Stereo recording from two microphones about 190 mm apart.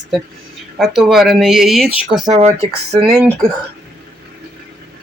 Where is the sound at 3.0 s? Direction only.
5° right (ahead or behind).